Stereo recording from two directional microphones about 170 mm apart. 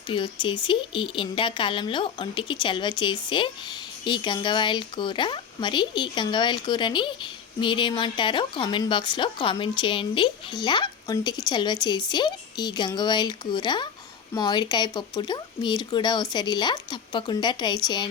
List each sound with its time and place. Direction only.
0.1 s speech: 30° left (ahead or behind)